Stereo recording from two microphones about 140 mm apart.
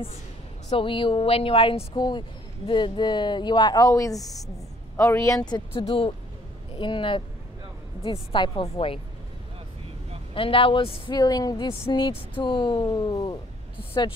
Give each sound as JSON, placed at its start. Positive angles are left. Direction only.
{"t": 0.7, "sound": "speech", "side_deg": 40}
{"t": 10.3, "sound": "speech", "side_deg": 40}
{"t": 11.1, "sound": "speech", "side_deg": 30}